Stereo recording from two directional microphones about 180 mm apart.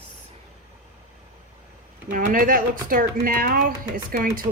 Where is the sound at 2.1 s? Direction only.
45° right (ahead or behind).